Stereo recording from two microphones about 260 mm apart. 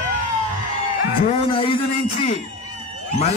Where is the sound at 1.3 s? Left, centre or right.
Left.